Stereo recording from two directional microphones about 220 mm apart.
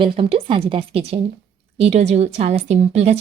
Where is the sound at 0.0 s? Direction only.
25° right (ahead or behind).